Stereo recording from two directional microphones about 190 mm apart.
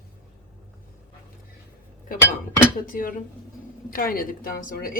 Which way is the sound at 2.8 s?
45° left (ahead or behind).